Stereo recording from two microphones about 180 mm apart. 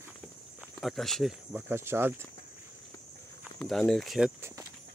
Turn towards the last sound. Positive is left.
turn(degrees=0)  # may be behind; listen again after turning